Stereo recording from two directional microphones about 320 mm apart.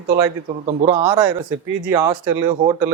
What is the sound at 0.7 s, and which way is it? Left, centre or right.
A man's voice, centre.